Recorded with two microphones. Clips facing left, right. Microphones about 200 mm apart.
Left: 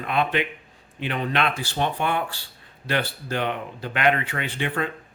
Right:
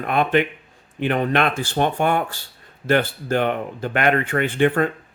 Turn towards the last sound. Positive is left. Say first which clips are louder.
# right 9 dB
turn(degrees=-50)  # may be behind; listen again after turning